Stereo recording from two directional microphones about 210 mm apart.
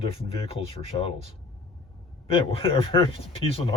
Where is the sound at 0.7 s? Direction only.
25° left (ahead or behind).